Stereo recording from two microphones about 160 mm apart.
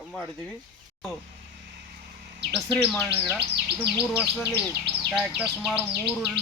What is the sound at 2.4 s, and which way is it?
Speech, 90° right.